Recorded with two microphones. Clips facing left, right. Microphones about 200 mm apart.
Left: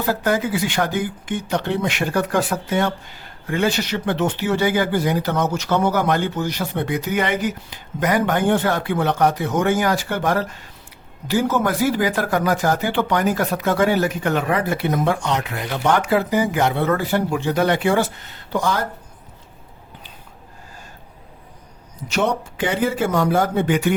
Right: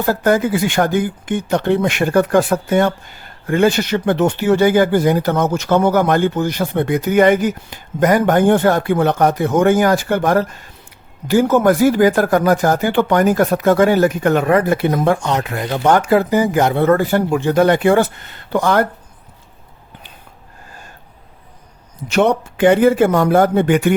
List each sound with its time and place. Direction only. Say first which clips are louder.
0.0 s speech: right 5 dB; 45° right (ahead or behind)
22.1 s speech: right 6 dB; 60° right (ahead or behind)